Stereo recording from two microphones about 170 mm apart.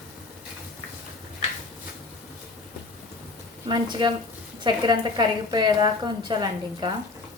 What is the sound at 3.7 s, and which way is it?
A woman's voice, 25° right (ahead or behind).